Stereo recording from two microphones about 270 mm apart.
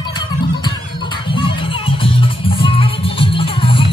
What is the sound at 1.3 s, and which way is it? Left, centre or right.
Music, centre.